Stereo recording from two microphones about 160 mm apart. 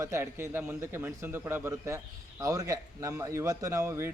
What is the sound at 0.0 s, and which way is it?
A man's voice, 15° right (ahead or behind).